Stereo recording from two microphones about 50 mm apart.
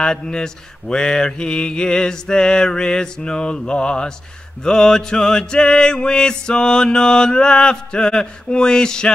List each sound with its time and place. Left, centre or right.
0.0 s mantra: centre